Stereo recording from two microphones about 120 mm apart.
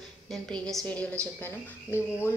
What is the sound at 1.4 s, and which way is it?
Speech, 20° left (ahead or behind).